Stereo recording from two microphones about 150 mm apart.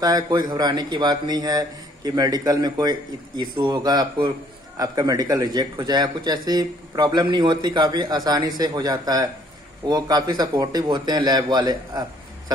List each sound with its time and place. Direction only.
0.0 s a man's voice: 25° right (ahead or behind)